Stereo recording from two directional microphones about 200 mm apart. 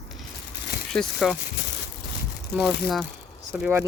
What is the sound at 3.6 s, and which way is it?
Speech, 10° right (ahead or behind).